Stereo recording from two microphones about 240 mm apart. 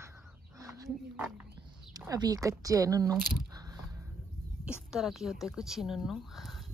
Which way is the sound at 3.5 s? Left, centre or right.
Centre.